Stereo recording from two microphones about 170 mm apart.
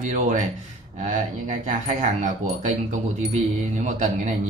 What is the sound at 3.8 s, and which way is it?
Speech, 45° right (ahead or behind).